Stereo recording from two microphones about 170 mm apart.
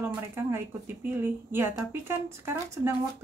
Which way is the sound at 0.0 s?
15° right (ahead or behind).